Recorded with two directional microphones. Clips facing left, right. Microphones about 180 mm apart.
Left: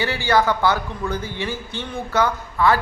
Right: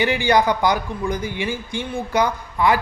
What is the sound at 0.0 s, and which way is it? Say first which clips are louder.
A man's voice: right 2 dB; 15° right (ahead or behind).